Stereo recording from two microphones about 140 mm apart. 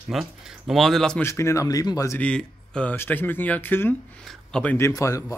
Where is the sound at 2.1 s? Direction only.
10° left (ahead or behind).